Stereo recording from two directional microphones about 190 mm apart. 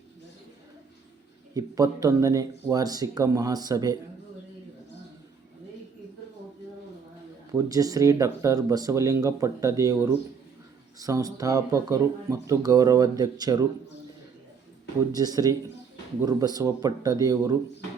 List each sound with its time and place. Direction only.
1.5 s speech: 20° right (ahead or behind)
7.5 s speech: 20° right (ahead or behind)
15.1 s speech: 20° right (ahead or behind)